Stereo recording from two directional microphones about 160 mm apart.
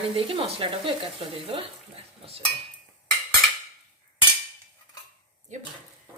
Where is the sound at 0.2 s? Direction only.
35° right (ahead or behind).